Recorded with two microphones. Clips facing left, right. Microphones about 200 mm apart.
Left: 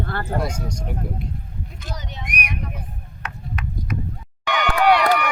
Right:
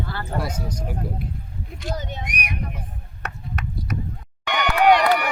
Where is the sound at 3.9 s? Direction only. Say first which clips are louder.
Left 1 dB; 40° right (ahead or behind).